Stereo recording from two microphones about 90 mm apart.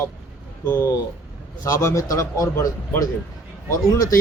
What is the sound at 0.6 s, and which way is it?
Speech, 25° left (ahead or behind).